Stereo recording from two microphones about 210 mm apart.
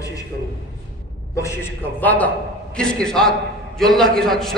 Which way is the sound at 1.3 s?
15° left (ahead or behind).